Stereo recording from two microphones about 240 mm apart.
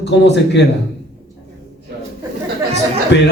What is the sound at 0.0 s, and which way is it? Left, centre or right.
Speech, left.